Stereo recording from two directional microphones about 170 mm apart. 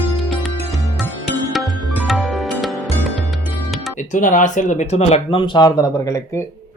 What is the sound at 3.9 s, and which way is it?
Speech, 50° left (ahead or behind).